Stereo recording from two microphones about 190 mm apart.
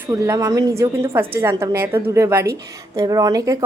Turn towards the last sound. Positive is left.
turn(degrees=-20)  # may be behind; listen again after turning